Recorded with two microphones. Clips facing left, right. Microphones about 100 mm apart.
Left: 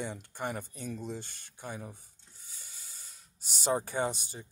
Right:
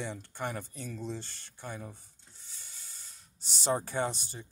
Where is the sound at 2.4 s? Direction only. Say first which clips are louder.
Left 1 dB; 10° left (ahead or behind).